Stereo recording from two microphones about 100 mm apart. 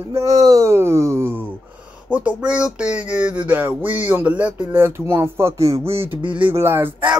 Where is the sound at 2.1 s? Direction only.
15° right (ahead or behind); by 5.8 s 30° right (ahead or behind).